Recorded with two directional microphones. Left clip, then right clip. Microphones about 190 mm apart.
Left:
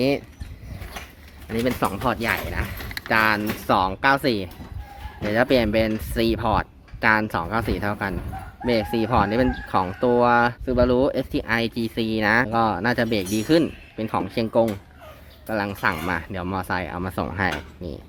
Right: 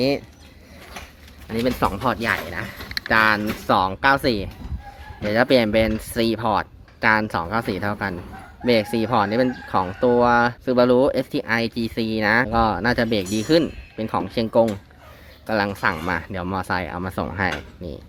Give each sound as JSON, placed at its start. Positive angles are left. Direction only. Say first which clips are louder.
{"t": 1.5, "sound": "speech", "louder": "right 2 dB", "side_deg": -10}
{"t": 10.7, "sound": "speech", "louder": "right 3 dB", "side_deg": -15}